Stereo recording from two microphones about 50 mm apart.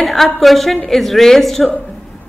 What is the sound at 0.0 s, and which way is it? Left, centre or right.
A woman's voice, centre.